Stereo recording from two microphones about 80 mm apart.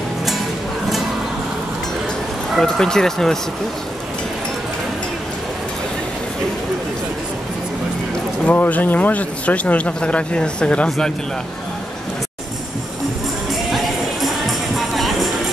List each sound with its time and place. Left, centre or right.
2.6 s speech: centre
8.5 s speech: centre
13.7 s tambourine: centre